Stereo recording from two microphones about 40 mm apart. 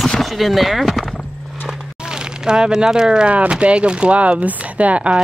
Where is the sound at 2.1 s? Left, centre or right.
Centre.